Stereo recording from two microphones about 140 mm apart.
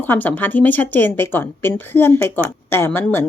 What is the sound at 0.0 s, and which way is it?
Speech, 10° left (ahead or behind).